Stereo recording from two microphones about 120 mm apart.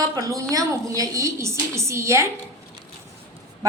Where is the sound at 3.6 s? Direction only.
30° right (ahead or behind).